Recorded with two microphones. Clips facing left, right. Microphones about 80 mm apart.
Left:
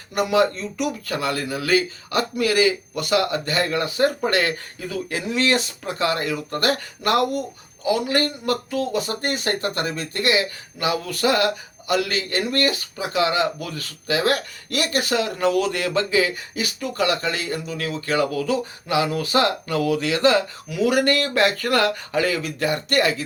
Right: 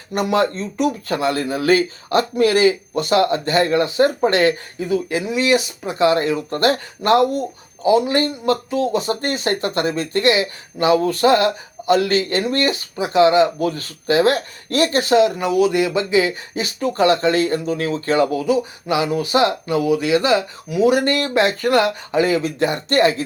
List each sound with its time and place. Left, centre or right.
0.1 s speech: right